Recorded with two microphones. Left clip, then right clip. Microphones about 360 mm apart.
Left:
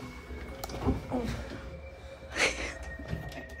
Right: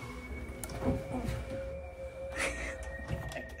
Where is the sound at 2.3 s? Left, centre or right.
Centre.